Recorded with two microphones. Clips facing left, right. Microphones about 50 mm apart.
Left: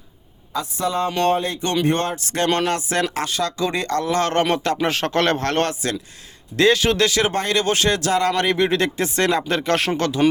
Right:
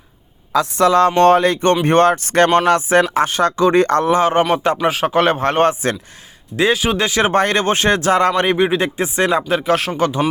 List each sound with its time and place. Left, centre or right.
0.6 s speech: right
1.3 s speech: right
2.6 s speech: right
4.1 s speech: centre; by 8.3 s right
8.3 s speech: right; by 9.9 s centre
10.0 s speech: centre